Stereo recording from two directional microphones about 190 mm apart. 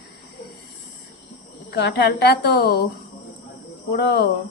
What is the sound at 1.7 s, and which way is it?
Speech, 60° left (ahead or behind).